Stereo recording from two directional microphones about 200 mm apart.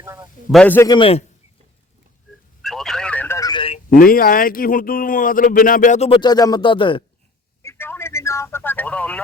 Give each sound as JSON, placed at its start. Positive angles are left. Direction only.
{"t": 0.0, "sound": "a man's voice", "side_deg": -15}
{"t": 0.5, "sound": "speech", "side_deg": 5}
{"t": 0.9, "sound": "a man's voice", "side_deg": 25}
{"t": 2.6, "sound": "telephone", "side_deg": 0}
{"t": 3.8, "sound": "speech", "side_deg": 45}
{"t": 7.6, "sound": "a sound", "side_deg": 10}